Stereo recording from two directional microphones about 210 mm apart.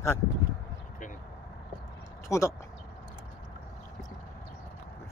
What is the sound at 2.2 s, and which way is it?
Speech, 15° left (ahead or behind).